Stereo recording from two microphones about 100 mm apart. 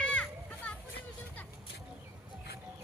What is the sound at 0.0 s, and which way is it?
Children playing, 10° left (ahead or behind).